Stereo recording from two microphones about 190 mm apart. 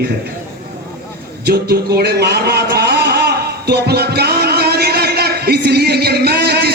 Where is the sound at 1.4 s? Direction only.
55° right (ahead or behind).